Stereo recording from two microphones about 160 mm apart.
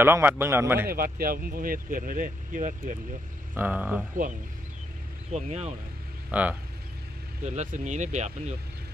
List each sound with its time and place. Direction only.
0.0 s a man's voice: 15° right (ahead or behind)
0.8 s speech: 65° right (ahead or behind)
3.5 s a man's voice: 10° right (ahead or behind)
5.3 s speech: 45° right (ahead or behind)
6.3 s a man's voice: 10° right (ahead or behind)
7.4 s speech: 50° right (ahead or behind)